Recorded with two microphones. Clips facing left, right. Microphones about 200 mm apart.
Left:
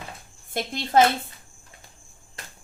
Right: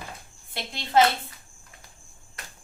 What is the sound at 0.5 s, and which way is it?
Speech, 45° left (ahead or behind).